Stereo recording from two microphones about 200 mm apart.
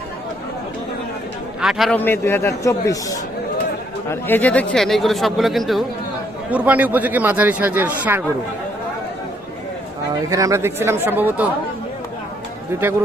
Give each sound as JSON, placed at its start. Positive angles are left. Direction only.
{"t": 1.6, "sound": "speech", "side_deg": 0}
{"t": 2.0, "sound": "a man's voice", "side_deg": 10}
{"t": 10.2, "sound": "speech", "side_deg": -15}
{"t": 12.7, "sound": "speech", "side_deg": -15}